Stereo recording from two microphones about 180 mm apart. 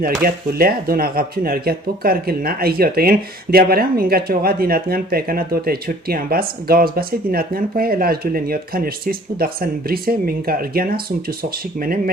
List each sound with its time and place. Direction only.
0.0 s speech: 55° right (ahead or behind)